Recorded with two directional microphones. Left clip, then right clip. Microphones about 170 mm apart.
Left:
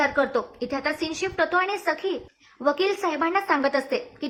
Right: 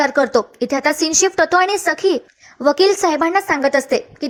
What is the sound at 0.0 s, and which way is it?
A woman's voice, 35° right (ahead or behind).